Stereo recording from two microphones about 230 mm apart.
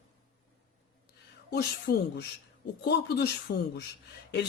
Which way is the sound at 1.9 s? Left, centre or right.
Left.